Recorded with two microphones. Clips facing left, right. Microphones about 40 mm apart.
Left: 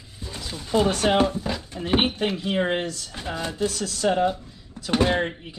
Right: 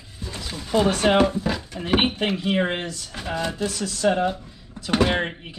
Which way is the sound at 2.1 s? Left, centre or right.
Right.